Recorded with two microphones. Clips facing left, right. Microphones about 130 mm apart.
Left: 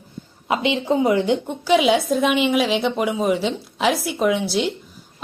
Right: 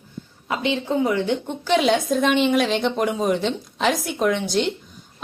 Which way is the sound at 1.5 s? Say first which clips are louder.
Left 1 dB; 5° left (ahead or behind).